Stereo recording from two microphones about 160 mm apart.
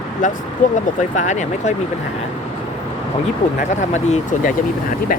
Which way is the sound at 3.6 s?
45° left (ahead or behind).